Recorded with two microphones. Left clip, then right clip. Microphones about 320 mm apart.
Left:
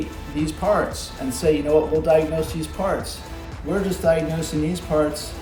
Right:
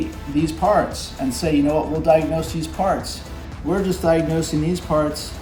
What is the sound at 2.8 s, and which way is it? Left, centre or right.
Speech, centre.